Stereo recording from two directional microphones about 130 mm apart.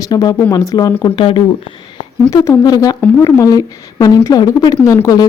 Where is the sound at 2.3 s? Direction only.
25° left (ahead or behind).